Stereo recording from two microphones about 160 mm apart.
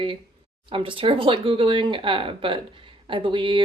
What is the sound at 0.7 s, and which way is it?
Speech, 35° right (ahead or behind).